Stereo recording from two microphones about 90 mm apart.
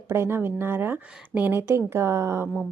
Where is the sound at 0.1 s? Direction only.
25° right (ahead or behind).